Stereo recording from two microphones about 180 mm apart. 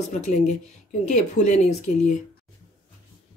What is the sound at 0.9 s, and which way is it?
A woman's voice, 40° left (ahead or behind).